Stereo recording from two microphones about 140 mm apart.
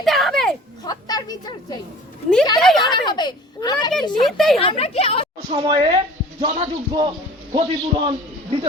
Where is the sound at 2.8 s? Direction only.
30° left (ahead or behind).